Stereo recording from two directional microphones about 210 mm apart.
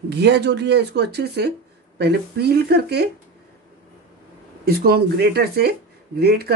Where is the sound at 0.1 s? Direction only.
55° right (ahead or behind).